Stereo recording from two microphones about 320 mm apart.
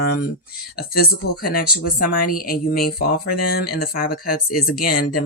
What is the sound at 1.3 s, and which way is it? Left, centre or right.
Speech, left.